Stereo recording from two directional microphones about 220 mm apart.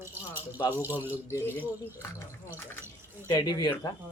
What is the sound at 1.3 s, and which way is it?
Speech, 10° left (ahead or behind).